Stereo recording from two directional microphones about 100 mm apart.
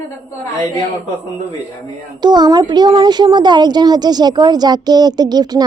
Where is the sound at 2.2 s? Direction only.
45° right (ahead or behind).